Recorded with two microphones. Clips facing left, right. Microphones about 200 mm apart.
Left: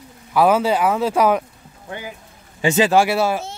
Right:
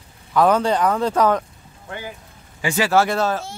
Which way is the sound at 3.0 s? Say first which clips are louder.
Left 2 dB; 10° left (ahead or behind).